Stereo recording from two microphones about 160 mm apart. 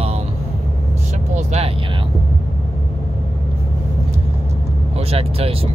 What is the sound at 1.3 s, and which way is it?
Vehicle, 40° right (ahead or behind).